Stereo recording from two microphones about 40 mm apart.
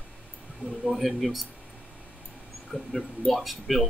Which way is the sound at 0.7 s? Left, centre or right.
Centre.